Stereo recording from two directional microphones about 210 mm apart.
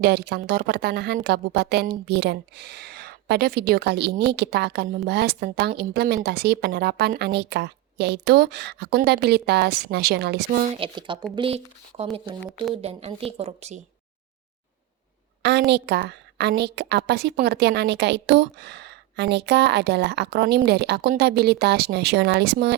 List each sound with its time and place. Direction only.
0.0 s a woman's voice: 50° right (ahead or behind)
10.8 s speech: 25° right (ahead or behind)
15.4 s a woman's voice: 55° right (ahead or behind)